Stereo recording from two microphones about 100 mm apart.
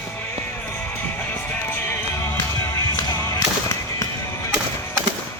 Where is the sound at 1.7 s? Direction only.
25° left (ahead or behind).